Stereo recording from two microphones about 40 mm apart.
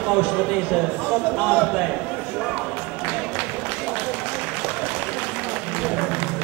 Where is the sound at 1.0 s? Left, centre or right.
Left.